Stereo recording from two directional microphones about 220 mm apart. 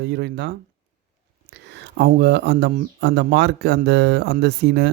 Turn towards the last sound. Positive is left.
turn(degrees=-50)  # may be behind; listen again after turning